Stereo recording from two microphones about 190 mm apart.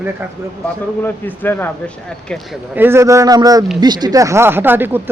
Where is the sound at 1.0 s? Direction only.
10° left (ahead or behind).